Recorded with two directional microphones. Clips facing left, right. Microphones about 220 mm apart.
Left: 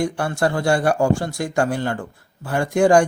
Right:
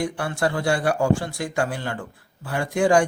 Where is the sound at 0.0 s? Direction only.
45° left (ahead or behind).